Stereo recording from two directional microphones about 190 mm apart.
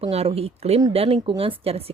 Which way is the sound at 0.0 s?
30° right (ahead or behind).